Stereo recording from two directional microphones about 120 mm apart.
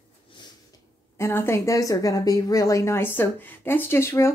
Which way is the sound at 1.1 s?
20° left (ahead or behind).